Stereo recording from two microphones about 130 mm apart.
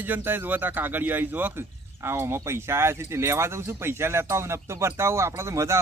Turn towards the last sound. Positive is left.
turn(degrees=-20)  # may be behind; listen again after turning